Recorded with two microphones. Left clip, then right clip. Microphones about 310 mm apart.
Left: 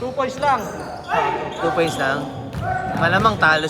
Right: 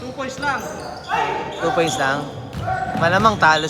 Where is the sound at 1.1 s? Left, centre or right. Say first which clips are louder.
Left 1 dB; centre.